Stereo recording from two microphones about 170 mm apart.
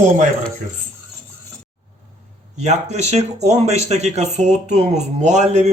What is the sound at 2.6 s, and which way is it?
Speech, 40° right (ahead or behind).